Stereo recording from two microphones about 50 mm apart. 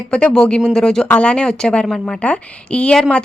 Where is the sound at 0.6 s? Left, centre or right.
Centre.